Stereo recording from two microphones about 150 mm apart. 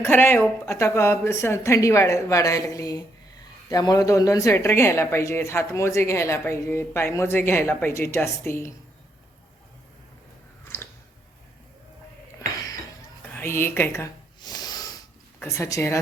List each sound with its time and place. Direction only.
0.0 s speech: 15° left (ahead or behind)
10.7 s chewing: 15° left (ahead or behind)
13.3 s snort: 15° left (ahead or behind)
15.4 s speech: 20° left (ahead or behind)